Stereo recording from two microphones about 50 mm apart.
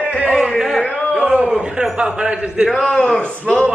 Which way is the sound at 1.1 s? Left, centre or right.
Right.